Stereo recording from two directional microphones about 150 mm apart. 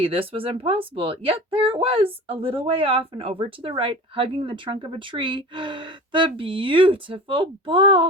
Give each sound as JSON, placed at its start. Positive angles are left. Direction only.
{"t": 0.0, "sound": "speech", "side_deg": -35}